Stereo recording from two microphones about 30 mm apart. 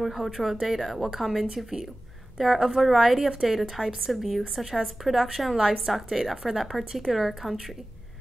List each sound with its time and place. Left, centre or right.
0.0 s a woman's voice: centre
1.5 s a woman's voice: centre
2.3 s a woman's voice: centre
6.8 s speech: centre
7.1 s a woman's voice: centre